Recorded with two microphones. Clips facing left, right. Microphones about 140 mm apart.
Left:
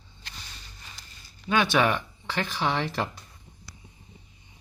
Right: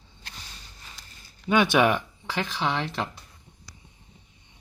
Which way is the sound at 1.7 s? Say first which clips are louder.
Right 2 dB; 10° right (ahead or behind).